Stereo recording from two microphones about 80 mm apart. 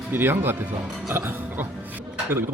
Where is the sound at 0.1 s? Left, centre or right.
Right.